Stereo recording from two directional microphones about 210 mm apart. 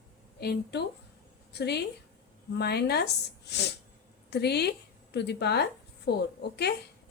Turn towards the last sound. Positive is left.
turn(degrees=50)  # may be behind; listen again after turning